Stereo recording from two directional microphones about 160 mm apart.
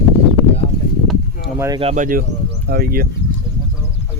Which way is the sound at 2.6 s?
70° right (ahead or behind).